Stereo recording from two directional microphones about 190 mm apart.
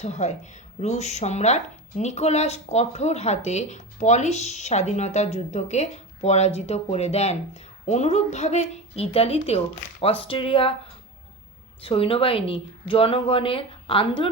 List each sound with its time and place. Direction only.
0.0 s a woman's voice: 35° left (ahead or behind)
11.8 s a woman's voice: 30° left (ahead or behind)